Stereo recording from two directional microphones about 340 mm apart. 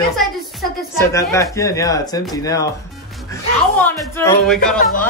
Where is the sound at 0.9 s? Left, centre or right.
Centre.